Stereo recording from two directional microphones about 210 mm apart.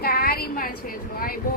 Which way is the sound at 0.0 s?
45° left (ahead or behind).